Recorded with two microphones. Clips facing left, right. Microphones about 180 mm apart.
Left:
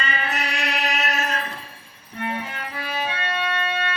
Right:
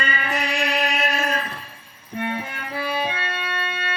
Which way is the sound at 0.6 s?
30° right (ahead or behind).